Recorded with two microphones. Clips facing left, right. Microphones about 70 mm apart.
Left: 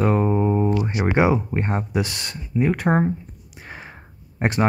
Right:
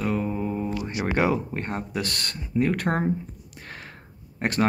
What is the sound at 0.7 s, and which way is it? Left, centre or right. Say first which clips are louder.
Speech: left 5 dB; left.